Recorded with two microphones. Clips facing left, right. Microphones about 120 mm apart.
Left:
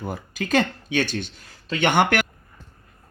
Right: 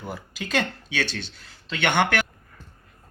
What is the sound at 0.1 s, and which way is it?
Speech, 50° left (ahead or behind).